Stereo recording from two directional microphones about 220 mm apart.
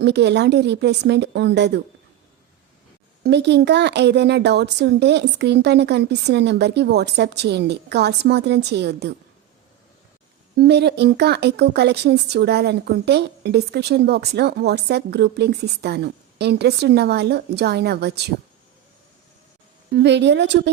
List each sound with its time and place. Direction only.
0.0 s speech: 50° right (ahead or behind)
3.2 s speech: 50° right (ahead or behind)
10.6 s speech: 50° right (ahead or behind)
19.9 s speech: 50° right (ahead or behind)